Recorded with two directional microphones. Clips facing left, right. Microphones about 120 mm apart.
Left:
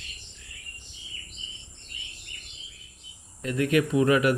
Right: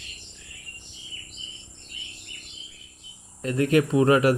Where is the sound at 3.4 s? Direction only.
35° right (ahead or behind).